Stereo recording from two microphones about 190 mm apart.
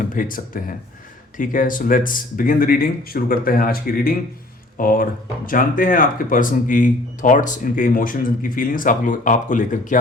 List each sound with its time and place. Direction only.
0.0 s speech: 45° left (ahead or behind)